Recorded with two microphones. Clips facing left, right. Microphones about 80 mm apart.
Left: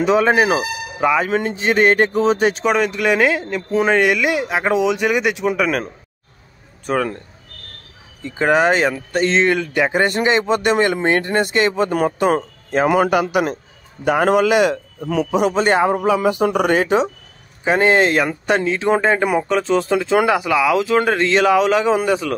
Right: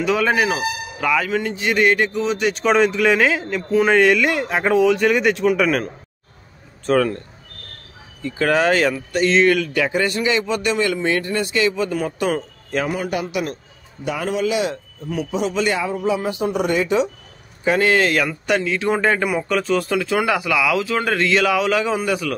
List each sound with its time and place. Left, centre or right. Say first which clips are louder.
0.0 s speech: left 4 dB; left
2.6 s speech: right 1 dB; centre
6.9 s speech: right 3 dB; centre
8.2 s speech: left 2 dB; left
8.9 s speech: even; left
12.8 s a man's voice: left 11 dB; left
14.0 s a man's voice: left 7 dB; left
15.5 s speech: left 5 dB; left
15.9 s a man's voice: left 5 dB; left
17.6 s speech: left 2 dB; left